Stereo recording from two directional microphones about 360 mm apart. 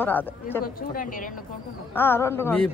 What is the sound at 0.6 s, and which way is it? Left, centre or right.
Speech, left.